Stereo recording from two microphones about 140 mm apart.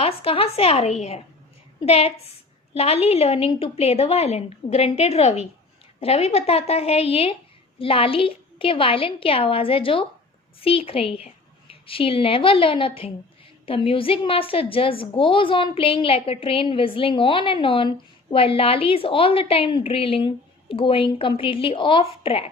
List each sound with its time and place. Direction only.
0.0 s a woman's voice: 45° left (ahead or behind)